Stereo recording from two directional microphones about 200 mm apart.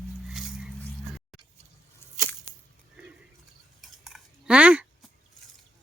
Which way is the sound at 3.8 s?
Centre (ahead or behind).